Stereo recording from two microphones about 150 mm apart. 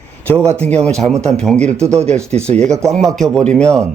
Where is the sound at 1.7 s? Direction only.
20° right (ahead or behind).